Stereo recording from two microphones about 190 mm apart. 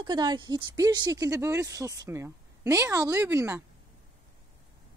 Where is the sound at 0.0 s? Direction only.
25° right (ahead or behind).